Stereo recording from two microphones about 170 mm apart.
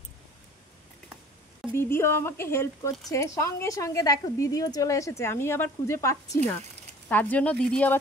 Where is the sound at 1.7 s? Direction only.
15° left (ahead or behind).